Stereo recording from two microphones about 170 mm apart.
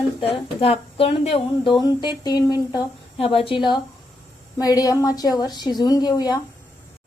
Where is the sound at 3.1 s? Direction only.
35° left (ahead or behind).